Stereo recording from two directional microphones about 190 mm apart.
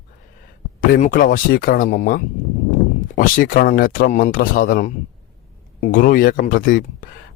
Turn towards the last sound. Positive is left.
turn(degrees=45)  # may be behind; listen again after turning